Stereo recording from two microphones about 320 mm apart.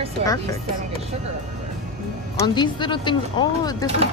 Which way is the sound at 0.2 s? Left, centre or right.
Centre.